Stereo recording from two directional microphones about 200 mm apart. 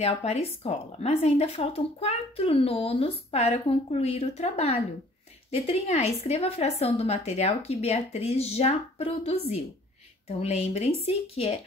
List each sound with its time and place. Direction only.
0.0 s speech: 30° left (ahead or behind)